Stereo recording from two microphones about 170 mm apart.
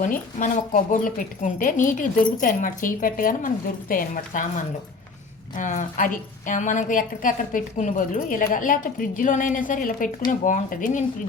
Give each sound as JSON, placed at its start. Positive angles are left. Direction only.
{"t": 0.0, "sound": "speech", "side_deg": 50}